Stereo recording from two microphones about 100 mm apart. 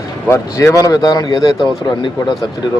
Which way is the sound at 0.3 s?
30° left (ahead or behind).